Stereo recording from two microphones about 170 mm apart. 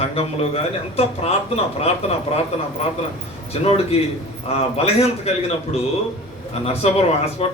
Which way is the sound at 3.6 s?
35° left (ahead or behind).